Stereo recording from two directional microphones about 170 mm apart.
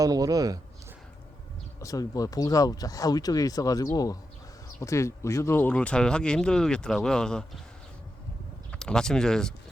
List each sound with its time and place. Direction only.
0.0 s a man's voice: 20° right (ahead or behind)
1.8 s speech: 20° left (ahead or behind); by 7.6 s 5° left (ahead or behind)
8.7 s speech: 5° left (ahead or behind)